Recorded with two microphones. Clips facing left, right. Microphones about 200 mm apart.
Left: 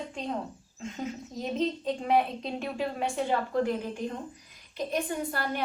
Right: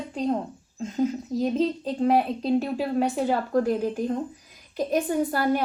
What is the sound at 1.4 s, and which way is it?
A woman's voice, 35° right (ahead or behind).